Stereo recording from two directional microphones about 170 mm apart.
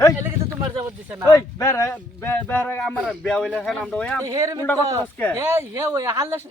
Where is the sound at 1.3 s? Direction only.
20° left (ahead or behind).